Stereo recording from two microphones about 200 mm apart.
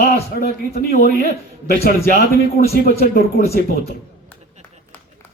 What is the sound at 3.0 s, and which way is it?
Speech, 50° left (ahead or behind).